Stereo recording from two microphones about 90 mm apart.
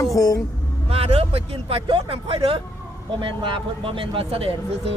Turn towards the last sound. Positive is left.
turn(degrees=-90)